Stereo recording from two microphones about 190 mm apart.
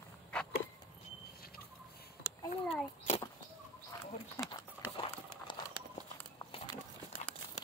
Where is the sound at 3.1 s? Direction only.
40° left (ahead or behind).